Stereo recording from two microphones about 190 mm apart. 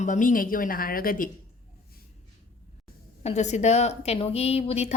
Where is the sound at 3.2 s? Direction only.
35° left (ahead or behind).